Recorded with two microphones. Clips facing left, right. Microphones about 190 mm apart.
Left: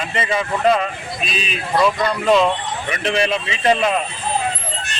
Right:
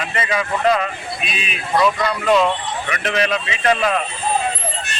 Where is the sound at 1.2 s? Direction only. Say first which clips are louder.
Left 6 dB; 35° left (ahead or behind).